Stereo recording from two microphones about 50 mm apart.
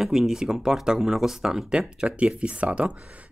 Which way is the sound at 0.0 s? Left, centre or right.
Centre.